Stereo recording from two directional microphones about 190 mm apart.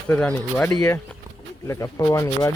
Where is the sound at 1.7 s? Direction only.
15° left (ahead or behind).